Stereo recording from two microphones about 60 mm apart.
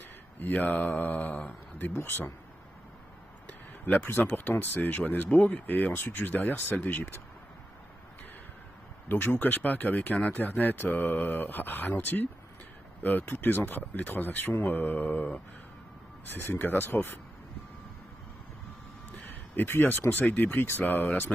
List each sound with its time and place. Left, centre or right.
0.4 s speech: left
2.0 s speech: left
3.4 s speech: left
9.1 s speech: left
16.3 s speech: left
19.5 s speech: left
20.6 s speech: left